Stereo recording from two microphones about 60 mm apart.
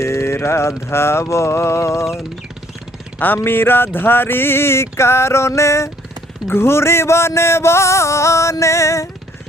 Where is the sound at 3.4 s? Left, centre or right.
Left.